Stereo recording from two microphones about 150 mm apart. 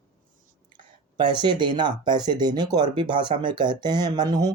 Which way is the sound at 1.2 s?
30° right (ahead or behind).